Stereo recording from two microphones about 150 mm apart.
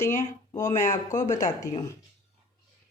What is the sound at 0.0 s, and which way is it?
Speech, 20° left (ahead or behind).